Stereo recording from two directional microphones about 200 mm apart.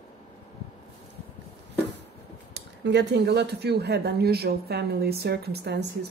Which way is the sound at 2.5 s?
55° right (ahead or behind).